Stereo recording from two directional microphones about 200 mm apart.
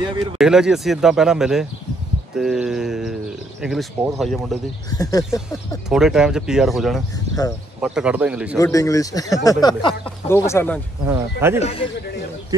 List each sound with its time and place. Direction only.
0.4 s speech: 5° right (ahead or behind)
2.3 s a sound: centre (ahead or behind)
3.6 s speech: centre (ahead or behind)
4.9 s speech: 15° left (ahead or behind)
5.9 s speech: centre (ahead or behind)
7.3 s a sound: 30° right (ahead or behind)
7.8 s speech: 5° right (ahead or behind)
8.5 s speech: 15° left (ahead or behind)
11.1 s speech: 10° right (ahead or behind)
11.6 s speech: 30° left (ahead or behind)